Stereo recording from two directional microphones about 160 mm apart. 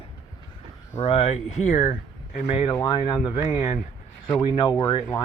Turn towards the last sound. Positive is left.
turn(degrees=25)  # may be behind; listen again after turning